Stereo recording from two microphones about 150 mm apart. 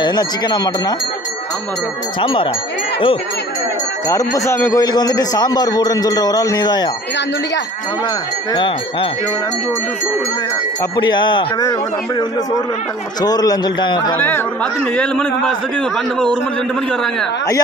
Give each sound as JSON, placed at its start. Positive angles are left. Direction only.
{"t": 0.0, "sound": "a man's voice", "side_deg": 30}
{"t": 2.1, "sound": "speech", "side_deg": 35}
{"t": 4.1, "sound": "a man's voice", "side_deg": 20}
{"t": 8.5, "sound": "speech", "side_deg": 35}
{"t": 11.0, "sound": "speech", "side_deg": 30}
{"t": 13.2, "sound": "a man's voice", "side_deg": 25}
{"t": 14.1, "sound": "a man's voice", "side_deg": 10}